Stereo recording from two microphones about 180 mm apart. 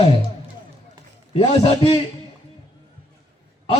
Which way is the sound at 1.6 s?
35° left (ahead or behind).